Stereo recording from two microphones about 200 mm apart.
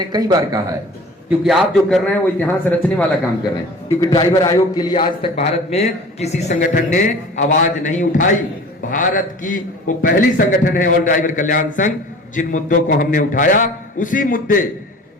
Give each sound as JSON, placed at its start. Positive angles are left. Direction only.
{"t": 0.1, "sound": "speech", "side_deg": -20}
{"t": 1.3, "sound": "a man's voice", "side_deg": 0}
{"t": 3.8, "sound": "a man's voice", "side_deg": 20}